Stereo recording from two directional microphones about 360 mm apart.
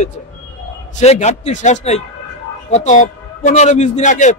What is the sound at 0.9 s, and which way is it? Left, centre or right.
Speech, centre.